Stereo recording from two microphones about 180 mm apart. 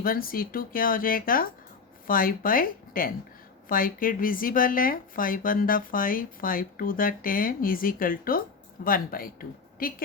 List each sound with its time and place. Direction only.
0.0 s speech: 55° left (ahead or behind)